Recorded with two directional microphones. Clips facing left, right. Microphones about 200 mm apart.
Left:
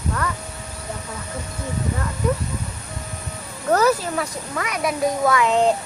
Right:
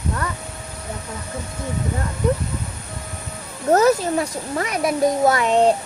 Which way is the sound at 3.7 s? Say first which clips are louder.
Right 3 dB; 25° right (ahead or behind).